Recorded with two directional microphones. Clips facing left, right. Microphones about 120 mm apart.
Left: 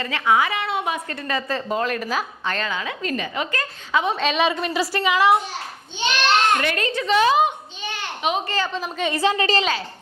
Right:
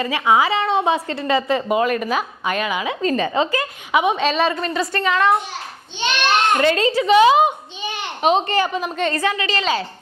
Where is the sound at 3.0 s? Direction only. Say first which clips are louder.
Right 9 dB; 35° right (ahead or behind); by 4.1 s 15° right (ahead or behind).